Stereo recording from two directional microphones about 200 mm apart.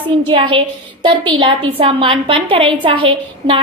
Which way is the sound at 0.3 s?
25° right (ahead or behind).